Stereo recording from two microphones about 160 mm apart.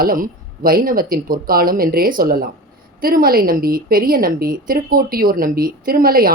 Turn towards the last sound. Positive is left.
turn(degrees=-70)  # may be behind; listen again after turning